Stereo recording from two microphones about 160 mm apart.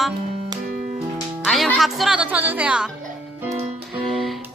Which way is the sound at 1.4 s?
Centre (ahead or behind).